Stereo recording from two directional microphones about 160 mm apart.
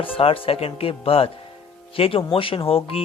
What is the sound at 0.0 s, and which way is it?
Speech, 35° left (ahead or behind).